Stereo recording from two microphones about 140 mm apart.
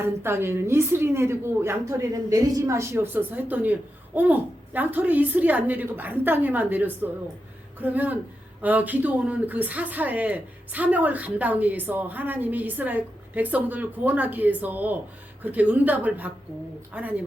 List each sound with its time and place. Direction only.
0.0 s speech: 15° right (ahead or behind)